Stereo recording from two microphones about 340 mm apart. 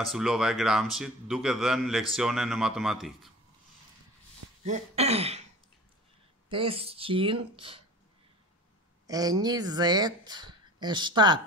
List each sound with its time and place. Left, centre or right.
0.0 s speech: centre
4.6 s speech: centre
6.5 s speech: centre
9.0 s speech: centre